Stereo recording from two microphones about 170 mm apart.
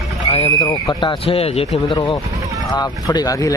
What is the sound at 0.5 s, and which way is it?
Speech, 20° left (ahead or behind).